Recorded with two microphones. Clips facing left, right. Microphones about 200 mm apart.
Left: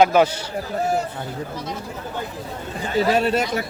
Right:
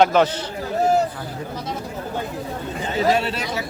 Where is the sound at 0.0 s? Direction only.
10° left (ahead or behind).